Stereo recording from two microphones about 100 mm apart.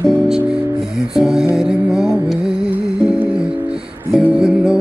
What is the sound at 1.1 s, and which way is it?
Music, 5° right (ahead or behind).